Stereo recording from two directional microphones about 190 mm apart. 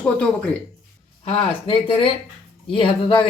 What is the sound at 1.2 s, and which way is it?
Speech, 30° left (ahead or behind).